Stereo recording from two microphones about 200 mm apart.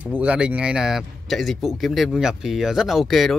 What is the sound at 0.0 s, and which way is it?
Speech, 5° right (ahead or behind).